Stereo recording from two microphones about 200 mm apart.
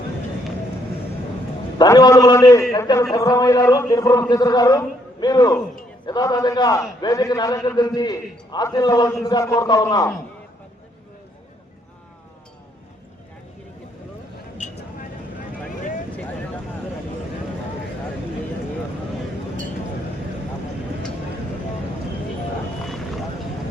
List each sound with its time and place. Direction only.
1.8 s a man's voice: 20° left (ahead or behind)